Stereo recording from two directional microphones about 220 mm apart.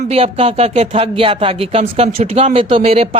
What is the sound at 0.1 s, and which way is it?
Speech, 25° right (ahead or behind).